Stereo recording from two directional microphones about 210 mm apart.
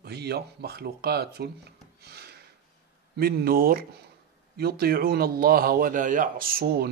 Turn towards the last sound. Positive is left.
turn(degrees=-50)  # may be behind; listen again after turning